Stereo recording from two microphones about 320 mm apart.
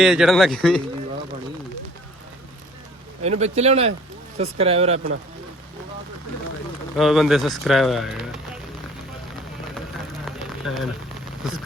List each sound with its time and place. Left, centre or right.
0.0 s speech: centre
3.2 s speech: right
6.9 s speech: centre
10.2 s a sound: centre